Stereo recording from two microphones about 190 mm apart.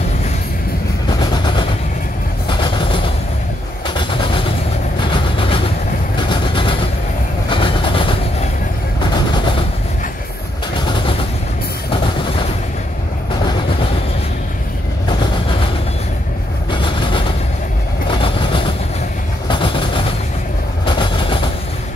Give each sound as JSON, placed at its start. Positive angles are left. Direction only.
{"t": 1.2, "sound": "a sound", "side_deg": 25}
{"t": 2.4, "sound": "train", "side_deg": 25}
{"t": 3.8, "sound": "vehicle", "side_deg": 25}
{"t": 5.1, "sound": "train", "side_deg": 30}
{"t": 6.2, "sound": "vehicle", "side_deg": 25}
{"t": 7.4, "sound": "train", "side_deg": 25}
{"t": 10.9, "sound": "vehicle", "side_deg": 30}
{"t": 11.9, "sound": "a sound", "side_deg": 30}
{"t": 16.7, "sound": "vehicle", "side_deg": 25}
{"t": 19.5, "sound": "train", "side_deg": 25}